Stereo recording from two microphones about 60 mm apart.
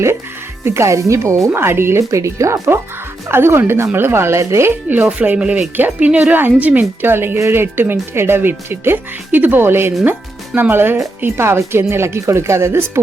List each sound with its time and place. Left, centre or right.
0.6 s speech: right
1.5 s speech: right
2.0 s speech: right
4.7 s speech: right
6.1 s speech: centre
6.3 s speech: right
7.1 s speech: right